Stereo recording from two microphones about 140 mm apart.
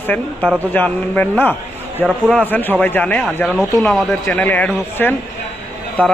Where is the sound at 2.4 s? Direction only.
15° left (ahead or behind).